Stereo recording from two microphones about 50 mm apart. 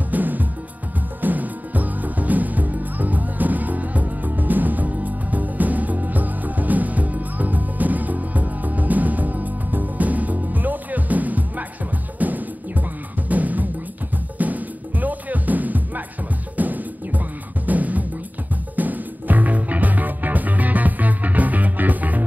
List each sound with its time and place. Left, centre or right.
0.1 s music: right